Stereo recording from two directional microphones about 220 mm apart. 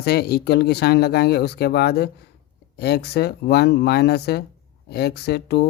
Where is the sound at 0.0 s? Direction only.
45° left (ahead or behind).